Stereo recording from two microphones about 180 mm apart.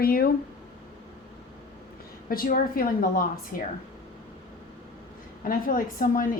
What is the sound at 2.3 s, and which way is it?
A woman's voice, 55° left (ahead or behind).